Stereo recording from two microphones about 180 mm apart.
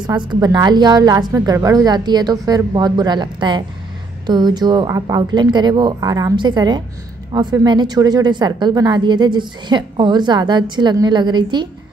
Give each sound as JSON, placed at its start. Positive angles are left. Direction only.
{"t": 0.0, "sound": "a woman's voice", "side_deg": -25}